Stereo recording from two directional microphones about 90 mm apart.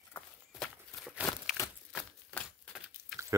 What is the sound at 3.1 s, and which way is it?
Drip, centre (ahead or behind).